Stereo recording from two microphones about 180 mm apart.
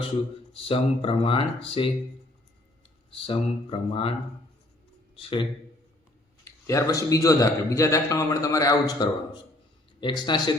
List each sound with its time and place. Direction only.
0.5 s speech: 30° left (ahead or behind)
3.2 s speech: 30° left (ahead or behind)
5.1 s speech: 30° left (ahead or behind)
6.4 s a man's voice: 20° left (ahead or behind)